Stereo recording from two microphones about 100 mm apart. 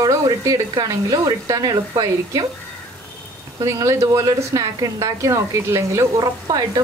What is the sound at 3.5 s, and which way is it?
A woman's voice, 35° right (ahead or behind).